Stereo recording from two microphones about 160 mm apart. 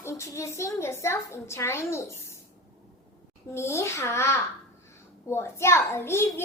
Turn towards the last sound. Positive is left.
turn(degrees=15)  # may be behind; listen again after turning